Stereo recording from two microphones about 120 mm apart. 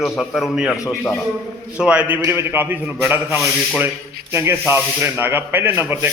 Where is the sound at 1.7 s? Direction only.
10° right (ahead or behind).